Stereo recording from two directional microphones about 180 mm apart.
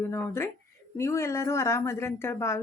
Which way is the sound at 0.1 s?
15° left (ahead or behind).